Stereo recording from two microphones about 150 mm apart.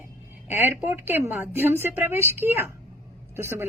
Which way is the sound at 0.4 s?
15° right (ahead or behind).